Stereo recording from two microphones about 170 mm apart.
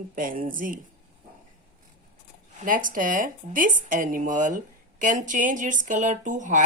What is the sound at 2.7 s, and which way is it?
Speech, 55° right (ahead or behind).